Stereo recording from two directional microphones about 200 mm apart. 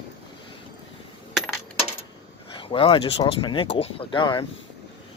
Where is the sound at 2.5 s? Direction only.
25° left (ahead or behind).